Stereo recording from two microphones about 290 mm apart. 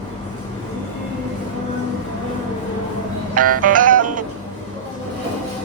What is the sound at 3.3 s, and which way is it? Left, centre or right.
Music, right.